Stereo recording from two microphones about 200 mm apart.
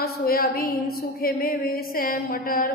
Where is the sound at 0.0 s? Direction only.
50° left (ahead or behind).